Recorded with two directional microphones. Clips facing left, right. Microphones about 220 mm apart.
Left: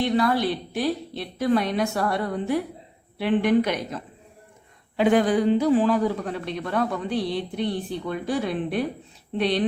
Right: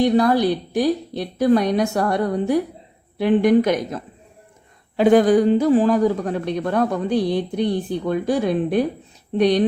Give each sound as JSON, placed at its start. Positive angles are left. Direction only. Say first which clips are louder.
{"t": 0.0, "sound": "a woman's voice", "louder": "right 6 dB", "side_deg": -40}